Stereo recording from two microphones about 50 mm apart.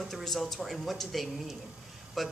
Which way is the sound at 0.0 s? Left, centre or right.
Centre.